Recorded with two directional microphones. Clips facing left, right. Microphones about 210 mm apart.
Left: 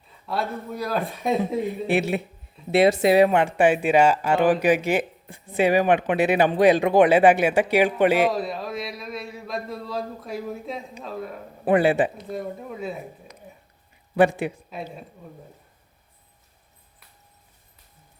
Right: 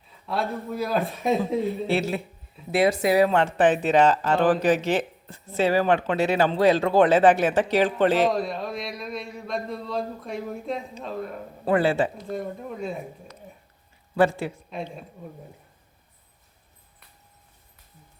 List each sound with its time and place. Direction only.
0.3 s a man's voice: centre (ahead or behind)
1.9 s a man's voice: 20° left (ahead or behind); by 11.3 s centre (ahead or behind)
11.6 s speech: 20° left (ahead or behind)
12.3 s a man's voice: centre (ahead or behind)
14.2 s speech: 20° left (ahead or behind)
14.7 s a man's voice: 5° left (ahead or behind)